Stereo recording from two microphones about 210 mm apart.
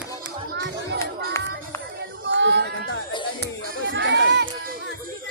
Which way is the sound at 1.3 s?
10° left (ahead or behind).